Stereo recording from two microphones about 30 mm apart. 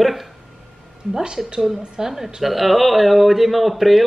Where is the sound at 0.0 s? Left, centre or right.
Centre.